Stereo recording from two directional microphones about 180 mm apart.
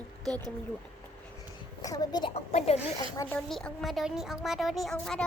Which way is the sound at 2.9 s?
20° left (ahead or behind).